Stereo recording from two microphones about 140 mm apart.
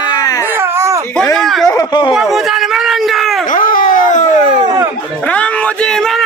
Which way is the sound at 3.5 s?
75° left (ahead or behind).